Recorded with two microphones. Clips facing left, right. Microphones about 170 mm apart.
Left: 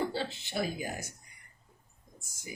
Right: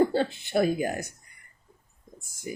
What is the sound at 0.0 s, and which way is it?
Speech, 50° right (ahead or behind).